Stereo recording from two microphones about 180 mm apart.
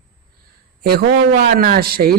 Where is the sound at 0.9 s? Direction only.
60° right (ahead or behind).